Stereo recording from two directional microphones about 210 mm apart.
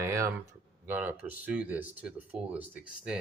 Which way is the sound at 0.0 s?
15° right (ahead or behind).